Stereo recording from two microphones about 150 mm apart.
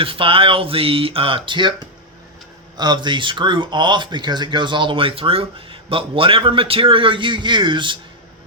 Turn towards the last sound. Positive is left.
turn(degrees=-30)  # may be behind; listen again after turning